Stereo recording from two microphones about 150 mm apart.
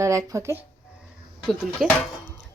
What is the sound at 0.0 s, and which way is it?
Speech, 20° right (ahead or behind).